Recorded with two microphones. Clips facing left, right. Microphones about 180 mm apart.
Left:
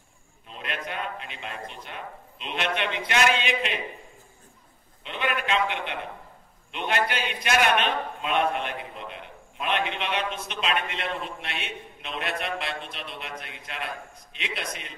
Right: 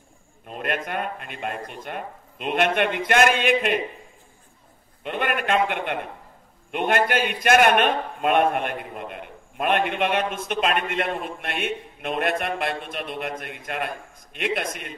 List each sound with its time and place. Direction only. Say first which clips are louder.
0.5 s a man's voice: right 7 dB; 50° right (ahead or behind)
5.0 s a man's voice: right 4 dB; 50° right (ahead or behind)